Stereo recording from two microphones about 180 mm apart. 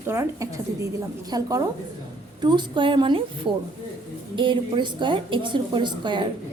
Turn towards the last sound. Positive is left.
turn(degrees=-25)  # may be behind; listen again after turning